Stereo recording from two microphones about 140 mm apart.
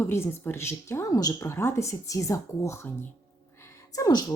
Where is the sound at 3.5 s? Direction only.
20° left (ahead or behind).